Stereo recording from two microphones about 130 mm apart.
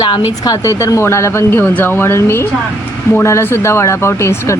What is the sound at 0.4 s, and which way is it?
Speech, 25° left (ahead or behind).